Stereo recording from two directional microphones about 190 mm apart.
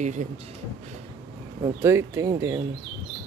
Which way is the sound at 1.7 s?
15° right (ahead or behind).